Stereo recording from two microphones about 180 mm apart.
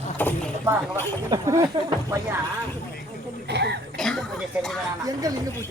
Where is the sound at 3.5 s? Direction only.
70° right (ahead or behind).